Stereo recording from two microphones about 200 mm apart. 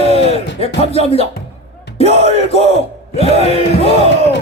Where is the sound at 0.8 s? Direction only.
30° left (ahead or behind).